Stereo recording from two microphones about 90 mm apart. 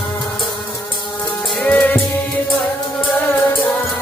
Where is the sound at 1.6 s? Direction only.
15° left (ahead or behind).